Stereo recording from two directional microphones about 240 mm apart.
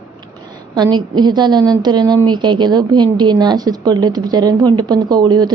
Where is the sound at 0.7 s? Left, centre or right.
Centre.